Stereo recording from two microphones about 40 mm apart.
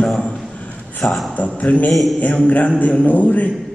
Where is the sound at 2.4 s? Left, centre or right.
Left.